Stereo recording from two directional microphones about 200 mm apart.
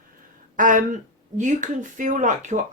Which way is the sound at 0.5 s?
40° right (ahead or behind).